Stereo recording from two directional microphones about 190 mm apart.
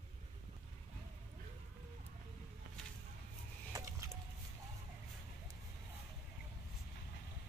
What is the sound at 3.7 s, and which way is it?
Wood, 15° right (ahead or behind).